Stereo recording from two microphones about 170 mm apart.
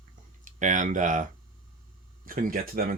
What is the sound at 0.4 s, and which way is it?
Speech, 45° right (ahead or behind).